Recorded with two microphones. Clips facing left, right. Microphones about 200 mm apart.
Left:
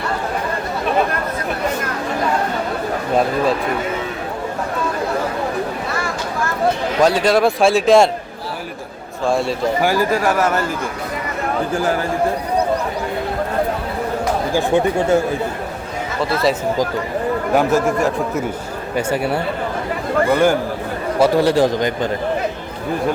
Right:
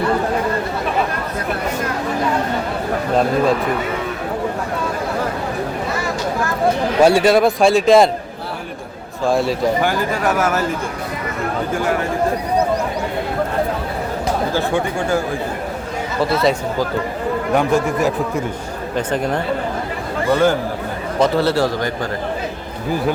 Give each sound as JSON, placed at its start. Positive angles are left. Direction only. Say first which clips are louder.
{"t": 7.0, "sound": "a man's voice", "louder": "right 2 dB", "side_deg": -5}
{"t": 9.2, "sound": "a man's voice", "louder": "right 1 dB", "side_deg": 0}
{"t": 14.5, "sound": "speech", "louder": "left 3 dB", "side_deg": 20}
{"t": 17.5, "sound": "a man's voice", "louder": "left 1 dB", "side_deg": 5}